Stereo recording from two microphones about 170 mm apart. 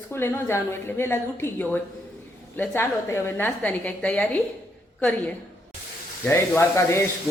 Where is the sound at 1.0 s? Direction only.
15° left (ahead or behind).